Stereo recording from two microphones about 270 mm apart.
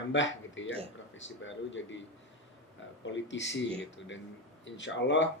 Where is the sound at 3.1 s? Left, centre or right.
Left.